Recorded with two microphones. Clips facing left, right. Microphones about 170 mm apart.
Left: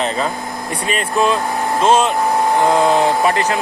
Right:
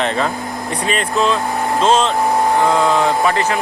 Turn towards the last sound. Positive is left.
turn(degrees=15)  # may be behind; listen again after turning